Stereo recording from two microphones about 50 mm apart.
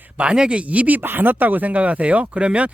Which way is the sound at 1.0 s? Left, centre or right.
Right.